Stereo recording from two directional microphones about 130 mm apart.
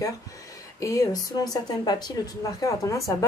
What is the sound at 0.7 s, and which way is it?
A woman's voice, 25° left (ahead or behind).